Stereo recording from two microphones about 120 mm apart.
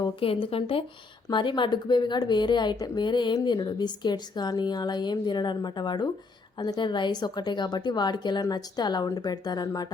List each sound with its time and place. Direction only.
0.0 s speech: 50° left (ahead or behind)